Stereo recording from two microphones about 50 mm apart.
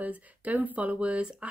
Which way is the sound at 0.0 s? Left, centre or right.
Right.